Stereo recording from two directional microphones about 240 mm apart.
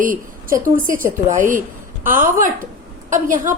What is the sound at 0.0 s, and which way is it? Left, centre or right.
A woman's voice, right.